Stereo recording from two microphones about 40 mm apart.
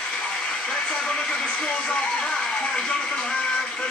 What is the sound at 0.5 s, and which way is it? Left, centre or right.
A man's voice, centre.